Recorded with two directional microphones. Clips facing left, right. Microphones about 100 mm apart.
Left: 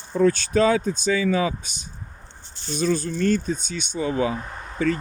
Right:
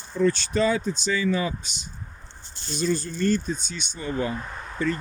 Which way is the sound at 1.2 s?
90° left.